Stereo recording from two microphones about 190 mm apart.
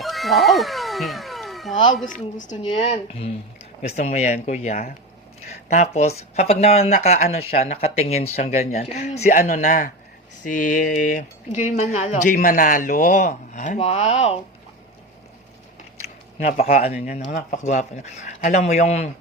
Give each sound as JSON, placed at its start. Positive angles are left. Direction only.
{"t": 0.0, "sound": "cat", "side_deg": 0}
{"t": 2.0, "sound": "a man's voice", "side_deg": 40}
{"t": 16.4, "sound": "a man's voice", "side_deg": 35}